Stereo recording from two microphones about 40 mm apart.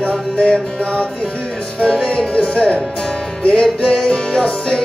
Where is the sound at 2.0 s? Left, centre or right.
Left.